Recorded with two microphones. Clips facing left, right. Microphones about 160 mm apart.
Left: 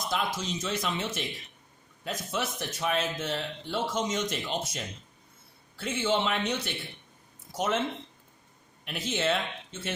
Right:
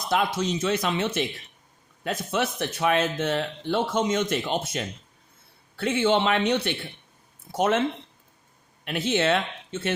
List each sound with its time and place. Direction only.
0.1 s speech: 60° right (ahead or behind)
8.9 s speech: 70° right (ahead or behind)